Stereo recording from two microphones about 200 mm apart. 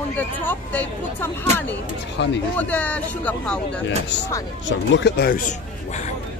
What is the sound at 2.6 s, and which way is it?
Speech, 10° left (ahead or behind).